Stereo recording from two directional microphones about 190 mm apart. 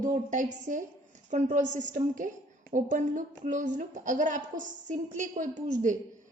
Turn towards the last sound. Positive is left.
turn(degrees=-40)  # may be behind; listen again after turning